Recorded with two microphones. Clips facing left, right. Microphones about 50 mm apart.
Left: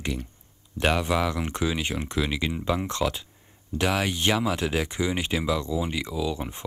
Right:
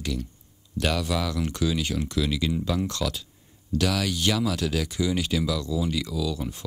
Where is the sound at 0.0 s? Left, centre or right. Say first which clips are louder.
Even; left.